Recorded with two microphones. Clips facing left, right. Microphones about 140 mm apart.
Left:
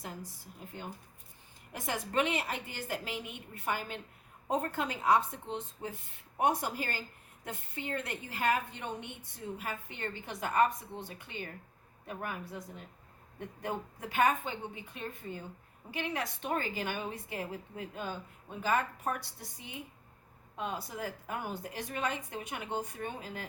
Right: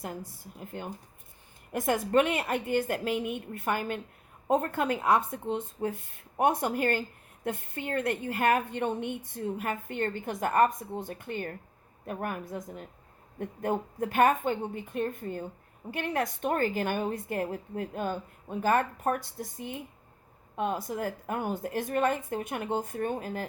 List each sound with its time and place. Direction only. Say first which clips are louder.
0.0 s speech: right 6 dB; 55° right (ahead or behind)
1.7 s a woman's voice: right 8 dB; 55° right (ahead or behind)